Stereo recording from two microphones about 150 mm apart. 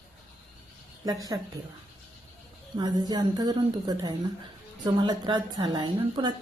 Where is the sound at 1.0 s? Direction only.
25° right (ahead or behind).